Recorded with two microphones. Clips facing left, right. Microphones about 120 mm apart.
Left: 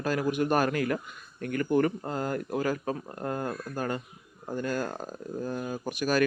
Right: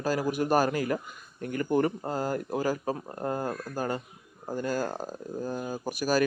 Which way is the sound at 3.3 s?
10° right (ahead or behind).